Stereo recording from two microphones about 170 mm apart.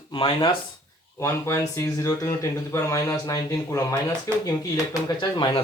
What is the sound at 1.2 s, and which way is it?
Speech, 15° left (ahead or behind).